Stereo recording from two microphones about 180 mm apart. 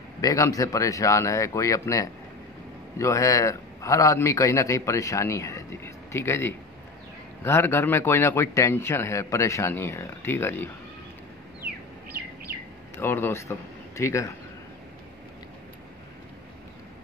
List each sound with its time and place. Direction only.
0.2 s a man's voice: 20° left (ahead or behind)
12.9 s speech: 10° left (ahead or behind)